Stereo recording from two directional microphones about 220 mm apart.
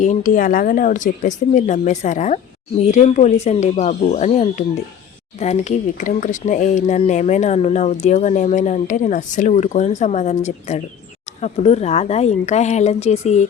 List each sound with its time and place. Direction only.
0.0 s speech: 35° left (ahead or behind)